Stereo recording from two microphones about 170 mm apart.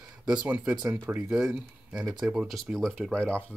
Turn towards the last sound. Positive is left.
turn(degrees=5)  # may be behind; listen again after turning